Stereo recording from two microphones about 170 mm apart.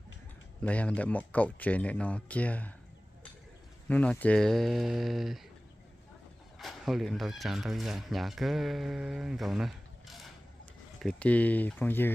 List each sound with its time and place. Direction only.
0.6 s speech: 5° left (ahead or behind)
3.9 s speech: 10° left (ahead or behind)
6.6 s speech: centre (ahead or behind)